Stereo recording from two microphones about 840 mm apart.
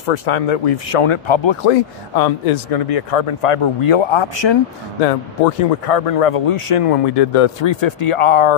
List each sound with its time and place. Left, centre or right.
0.0 s speech: left
2.1 s speech: left
5.0 s speech: left